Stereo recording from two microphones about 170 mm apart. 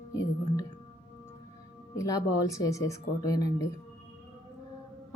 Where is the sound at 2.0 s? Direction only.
20° left (ahead or behind).